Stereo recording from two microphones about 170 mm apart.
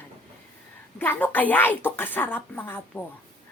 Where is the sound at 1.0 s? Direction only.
10° left (ahead or behind).